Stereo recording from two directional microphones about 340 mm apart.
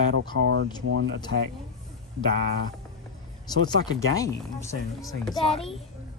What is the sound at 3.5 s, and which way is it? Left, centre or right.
A woman's voice, centre.